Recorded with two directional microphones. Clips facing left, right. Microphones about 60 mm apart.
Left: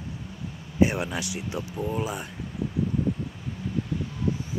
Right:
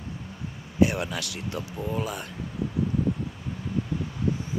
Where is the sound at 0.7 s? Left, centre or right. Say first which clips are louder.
Even; left.